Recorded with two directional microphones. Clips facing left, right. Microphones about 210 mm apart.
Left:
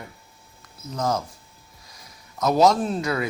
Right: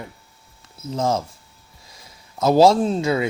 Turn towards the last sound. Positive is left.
turn(degrees=-25)  # may be behind; listen again after turning